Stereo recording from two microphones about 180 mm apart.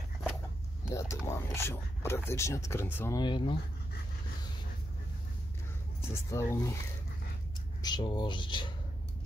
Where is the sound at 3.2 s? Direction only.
25° left (ahead or behind).